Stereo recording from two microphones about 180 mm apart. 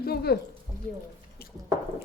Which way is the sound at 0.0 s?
60° left (ahead or behind).